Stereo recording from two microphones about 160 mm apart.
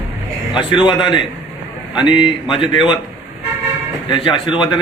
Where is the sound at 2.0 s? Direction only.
30° left (ahead or behind).